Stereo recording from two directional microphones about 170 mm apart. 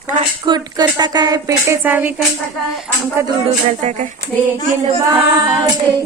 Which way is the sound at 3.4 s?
40° right (ahead or behind).